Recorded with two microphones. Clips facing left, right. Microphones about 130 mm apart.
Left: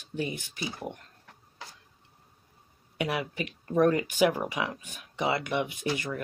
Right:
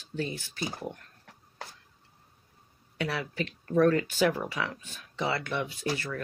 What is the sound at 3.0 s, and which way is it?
Speech, 15° left (ahead or behind).